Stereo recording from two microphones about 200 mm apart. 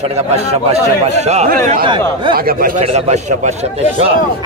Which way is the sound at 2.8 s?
35° right (ahead or behind).